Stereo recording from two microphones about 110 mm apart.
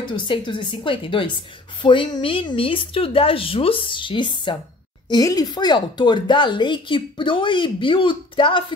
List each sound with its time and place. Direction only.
0.0 s speech: 45° left (ahead or behind)
5.1 s speech: 35° left (ahead or behind)